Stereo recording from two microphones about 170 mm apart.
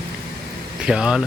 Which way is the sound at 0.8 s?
5° right (ahead or behind).